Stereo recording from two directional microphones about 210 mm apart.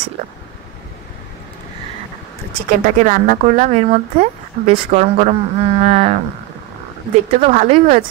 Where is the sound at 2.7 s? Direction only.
40° right (ahead or behind).